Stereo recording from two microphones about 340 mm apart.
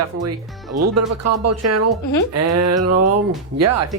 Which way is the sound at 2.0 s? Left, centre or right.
Left.